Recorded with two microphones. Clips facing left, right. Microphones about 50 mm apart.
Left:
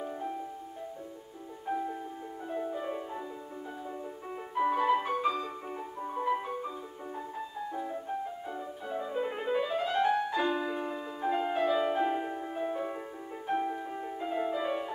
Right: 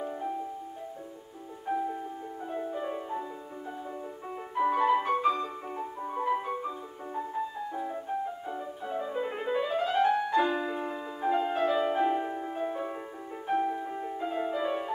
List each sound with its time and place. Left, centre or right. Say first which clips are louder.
1.7 s music: right 3 dB; centre
4.6 s music: right 2 dB; centre